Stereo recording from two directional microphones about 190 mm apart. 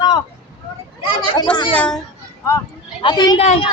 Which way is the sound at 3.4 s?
35° left (ahead or behind).